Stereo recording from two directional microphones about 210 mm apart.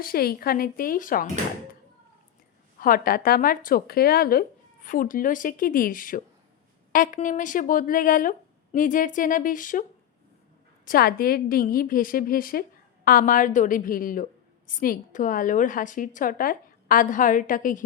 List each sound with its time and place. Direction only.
0.0 s speech: 45° left (ahead or behind)
2.8 s a woman's voice: 45° left (ahead or behind)
10.8 s a woman's voice: 45° left (ahead or behind)